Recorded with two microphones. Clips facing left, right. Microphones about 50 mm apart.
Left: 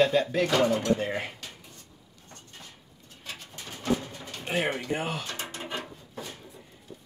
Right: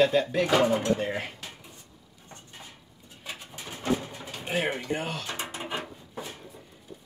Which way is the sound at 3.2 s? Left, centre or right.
Centre.